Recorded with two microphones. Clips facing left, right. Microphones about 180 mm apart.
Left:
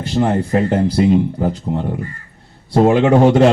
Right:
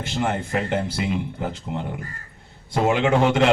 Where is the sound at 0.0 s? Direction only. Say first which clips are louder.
Left 8 dB; 40° left (ahead or behind).